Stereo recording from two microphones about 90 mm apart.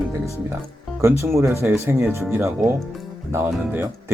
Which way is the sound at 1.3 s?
30° right (ahead or behind).